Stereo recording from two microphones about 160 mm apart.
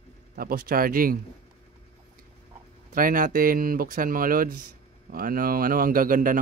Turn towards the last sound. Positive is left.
turn(degrees=-60)  # may be behind; listen again after turning